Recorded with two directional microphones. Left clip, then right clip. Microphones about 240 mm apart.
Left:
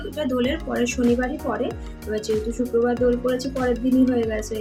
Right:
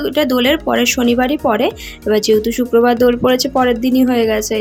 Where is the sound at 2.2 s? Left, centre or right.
Right.